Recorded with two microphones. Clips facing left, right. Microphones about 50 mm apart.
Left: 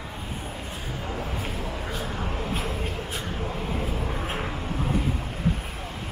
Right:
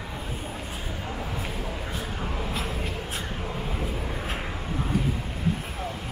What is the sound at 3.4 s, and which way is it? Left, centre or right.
Vehicle, centre.